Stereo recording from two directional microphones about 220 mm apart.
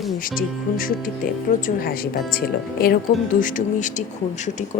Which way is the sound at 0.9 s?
40° left (ahead or behind).